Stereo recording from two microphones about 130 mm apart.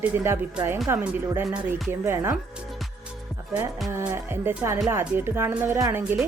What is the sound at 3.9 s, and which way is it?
Music, 20° right (ahead or behind).